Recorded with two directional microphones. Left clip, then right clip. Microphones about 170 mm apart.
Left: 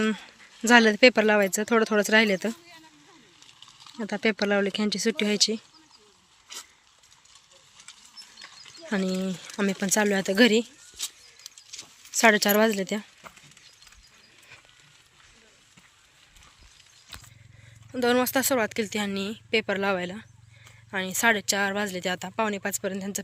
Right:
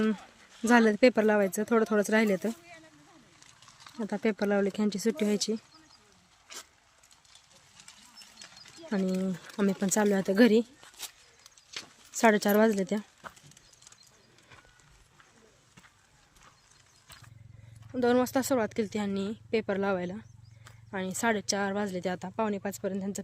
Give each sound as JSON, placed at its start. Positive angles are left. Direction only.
{"t": 0.0, "sound": "speech", "side_deg": 0}
{"t": 4.0, "sound": "speech", "side_deg": 0}
{"t": 8.9, "sound": "speech", "side_deg": 0}
{"t": 11.0, "sound": "a sound", "side_deg": -50}
{"t": 11.7, "sound": "a sound", "side_deg": -70}
{"t": 12.1, "sound": "speech", "side_deg": -5}
{"t": 17.9, "sound": "speech", "side_deg": -5}